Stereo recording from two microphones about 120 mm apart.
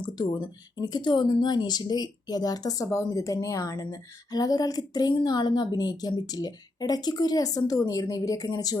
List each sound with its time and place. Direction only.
0.0 s speech: 40° left (ahead or behind)